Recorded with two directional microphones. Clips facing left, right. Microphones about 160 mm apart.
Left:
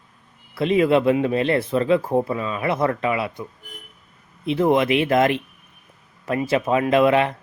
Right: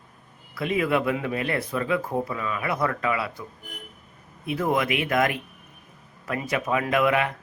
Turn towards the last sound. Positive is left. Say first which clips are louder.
# left 6 dB
turn(degrees=30)  # may be behind; listen again after turning